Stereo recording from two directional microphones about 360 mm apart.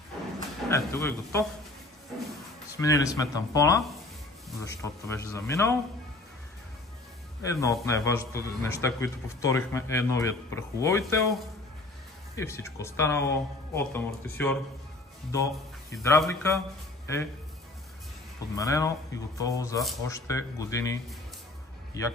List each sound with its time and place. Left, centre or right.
0.7 s a man's voice: centre
2.8 s a man's voice: centre
7.5 s a man's voice: centre
12.4 s a man's voice: centre
15.9 s a man's voice: centre
18.5 s a man's voice: centre